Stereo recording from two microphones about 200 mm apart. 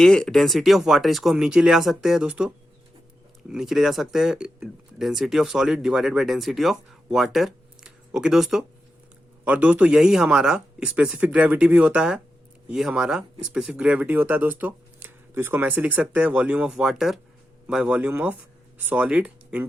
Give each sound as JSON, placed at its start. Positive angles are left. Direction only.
{"t": 0.0, "sound": "speech", "side_deg": 5}
{"t": 3.5, "sound": "speech", "side_deg": 0}